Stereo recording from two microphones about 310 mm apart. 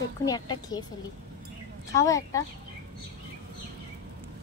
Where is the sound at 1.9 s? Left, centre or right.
Centre.